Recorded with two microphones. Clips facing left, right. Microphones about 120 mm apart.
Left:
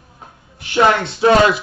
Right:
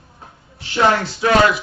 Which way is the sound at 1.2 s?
30° left (ahead or behind).